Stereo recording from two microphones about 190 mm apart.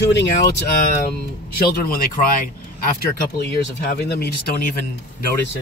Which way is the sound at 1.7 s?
50° left (ahead or behind).